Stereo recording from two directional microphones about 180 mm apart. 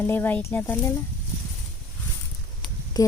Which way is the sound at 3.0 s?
20° left (ahead or behind).